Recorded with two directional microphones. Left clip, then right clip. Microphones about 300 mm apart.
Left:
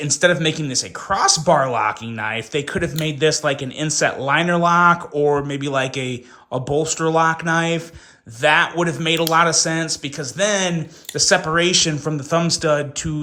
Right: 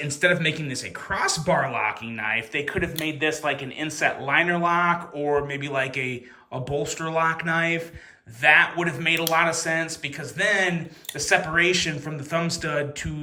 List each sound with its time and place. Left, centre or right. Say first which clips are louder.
0.0 s speech: left 5 dB; centre